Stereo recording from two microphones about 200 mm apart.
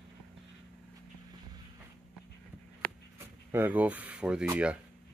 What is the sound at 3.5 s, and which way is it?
Speech, 10° right (ahead or behind).